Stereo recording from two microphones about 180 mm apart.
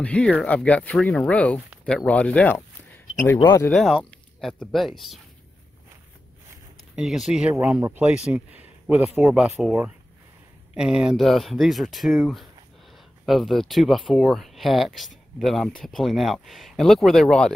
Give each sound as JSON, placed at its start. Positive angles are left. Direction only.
{"t": 0.0, "sound": "speech", "side_deg": 5}
{"t": 3.7, "sound": "speech", "side_deg": 0}
{"t": 7.0, "sound": "speech", "side_deg": 0}